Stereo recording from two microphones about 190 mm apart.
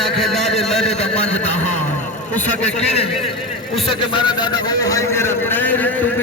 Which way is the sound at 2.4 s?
35° left (ahead or behind).